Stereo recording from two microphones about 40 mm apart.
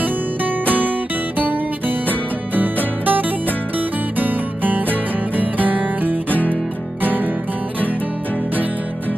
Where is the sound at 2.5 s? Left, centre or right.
Right.